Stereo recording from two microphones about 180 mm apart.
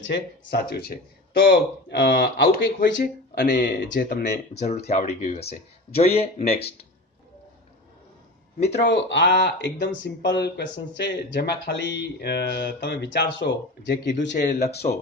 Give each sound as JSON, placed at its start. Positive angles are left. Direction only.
{"t": 0.0, "sound": "speech", "side_deg": 70}
{"t": 4.8, "sound": "speech", "side_deg": 35}
{"t": 8.6, "sound": "speech", "side_deg": 75}
{"t": 14.5, "sound": "speech", "side_deg": 40}